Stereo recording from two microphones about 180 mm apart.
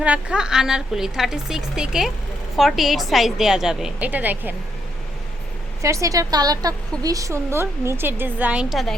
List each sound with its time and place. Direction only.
0.0 s a woman's voice: 5° right (ahead or behind)
5.8 s a woman's voice: 15° right (ahead or behind); by 9.0 s centre (ahead or behind)